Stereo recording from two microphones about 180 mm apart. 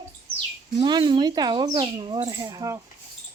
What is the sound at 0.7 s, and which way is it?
Speech, 25° right (ahead or behind).